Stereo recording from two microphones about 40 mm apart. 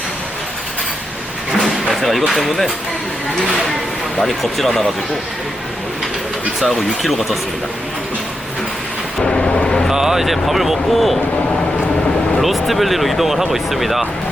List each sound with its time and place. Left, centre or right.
1.6 s speech: centre
4.2 s speech: centre
6.6 s speech: centre
9.2 s vehicle: left
9.9 s speech: centre
12.4 s speech: centre